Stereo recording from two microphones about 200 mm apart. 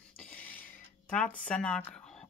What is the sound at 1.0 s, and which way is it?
Speech, 5° left (ahead or behind).